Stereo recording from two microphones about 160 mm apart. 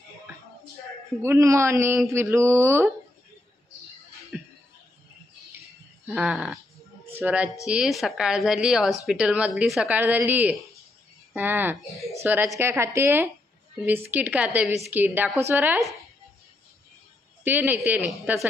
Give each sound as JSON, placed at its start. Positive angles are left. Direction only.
{"t": 1.2, "sound": "a woman's voice", "side_deg": -15}
{"t": 4.3, "sound": "music", "side_deg": -5}
{"t": 6.0, "sound": "a woman's voice", "side_deg": -5}
{"t": 17.4, "sound": "a woman's voice", "side_deg": -10}